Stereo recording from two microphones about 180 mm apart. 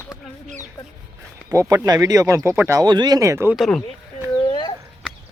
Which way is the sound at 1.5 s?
15° right (ahead or behind).